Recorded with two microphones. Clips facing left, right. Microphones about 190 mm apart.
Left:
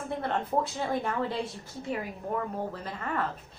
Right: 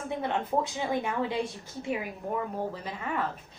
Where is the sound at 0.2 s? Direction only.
10° right (ahead or behind).